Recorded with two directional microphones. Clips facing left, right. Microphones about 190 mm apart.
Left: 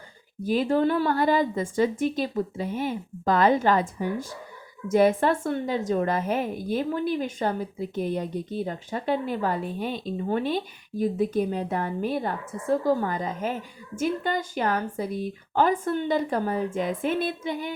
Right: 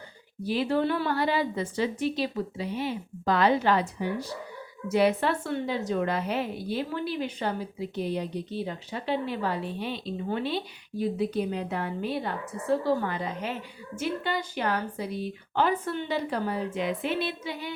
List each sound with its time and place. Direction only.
0.4 s a woman's voice: 45° left (ahead or behind)